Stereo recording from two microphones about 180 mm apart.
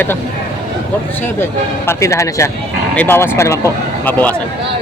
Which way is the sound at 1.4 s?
15° left (ahead or behind).